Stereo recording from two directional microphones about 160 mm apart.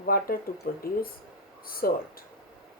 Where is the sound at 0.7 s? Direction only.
65° left (ahead or behind).